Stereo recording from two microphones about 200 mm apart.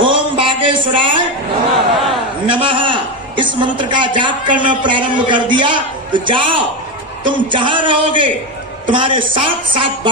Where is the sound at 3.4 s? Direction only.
25° right (ahead or behind).